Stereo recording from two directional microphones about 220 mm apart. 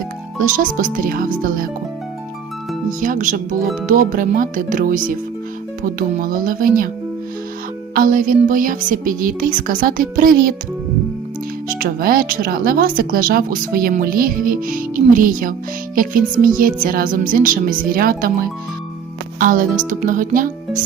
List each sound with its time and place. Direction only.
0.3 s speech: 35° right (ahead or behind)
3.0 s speech: 35° right (ahead or behind)
7.9 s speech: 40° right (ahead or behind)
11.8 s speech: 40° right (ahead or behind)